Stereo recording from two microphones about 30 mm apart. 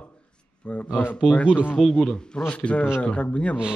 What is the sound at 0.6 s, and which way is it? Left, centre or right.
Speech, left.